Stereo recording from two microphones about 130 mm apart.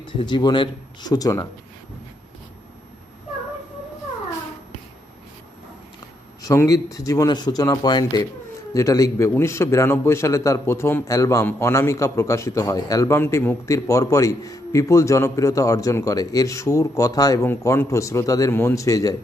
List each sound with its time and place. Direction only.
0.0 s speech: 35° left (ahead or behind)
6.4 s a man's voice: 25° left (ahead or behind)